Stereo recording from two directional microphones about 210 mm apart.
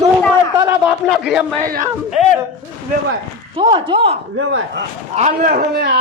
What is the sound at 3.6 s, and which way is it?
Speech, 25° right (ahead or behind).